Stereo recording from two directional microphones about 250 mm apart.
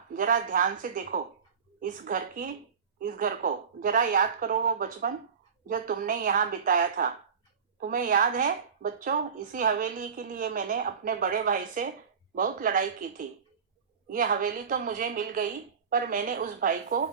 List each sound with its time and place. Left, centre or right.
0.1 s speech: right